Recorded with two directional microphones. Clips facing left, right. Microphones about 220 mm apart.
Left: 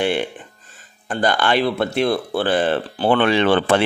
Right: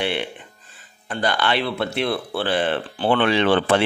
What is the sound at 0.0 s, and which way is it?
Speech, 45° left (ahead or behind).